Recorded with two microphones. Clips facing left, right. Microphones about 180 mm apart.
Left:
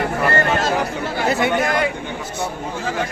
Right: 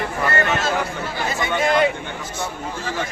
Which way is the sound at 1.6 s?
25° right (ahead or behind).